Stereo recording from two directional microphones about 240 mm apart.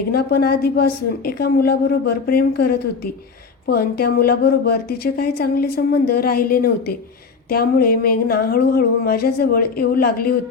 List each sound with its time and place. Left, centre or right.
0.1 s a woman's voice: left